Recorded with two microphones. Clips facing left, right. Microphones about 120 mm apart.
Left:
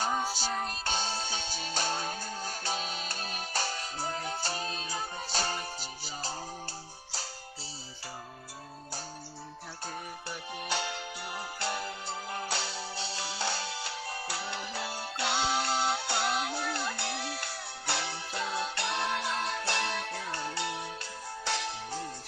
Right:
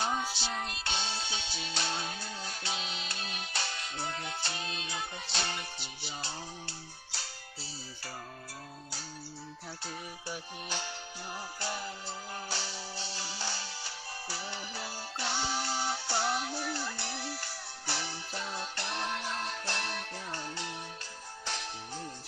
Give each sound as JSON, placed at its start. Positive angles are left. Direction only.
{"t": 0.0, "sound": "music", "side_deg": 45}
{"t": 10.8, "sound": "music", "side_deg": 80}
{"t": 21.4, "sound": "music", "side_deg": 90}